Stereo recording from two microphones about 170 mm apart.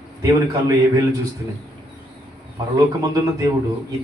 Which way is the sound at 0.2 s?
20° right (ahead or behind).